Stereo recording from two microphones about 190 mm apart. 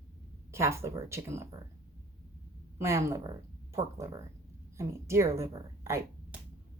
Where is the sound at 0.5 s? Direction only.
15° right (ahead or behind).